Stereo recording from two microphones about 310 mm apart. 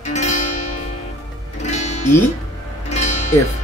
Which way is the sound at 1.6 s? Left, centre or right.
Left.